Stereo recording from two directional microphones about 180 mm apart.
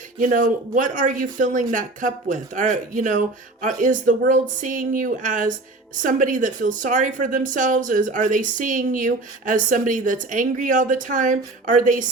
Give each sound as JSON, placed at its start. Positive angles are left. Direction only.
{"t": 0.2, "sound": "speech", "side_deg": -50}